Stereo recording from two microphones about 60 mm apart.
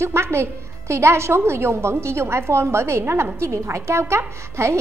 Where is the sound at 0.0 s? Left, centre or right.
Right.